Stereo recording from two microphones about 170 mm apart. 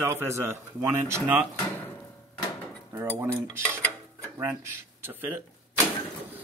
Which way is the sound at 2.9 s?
15° right (ahead or behind).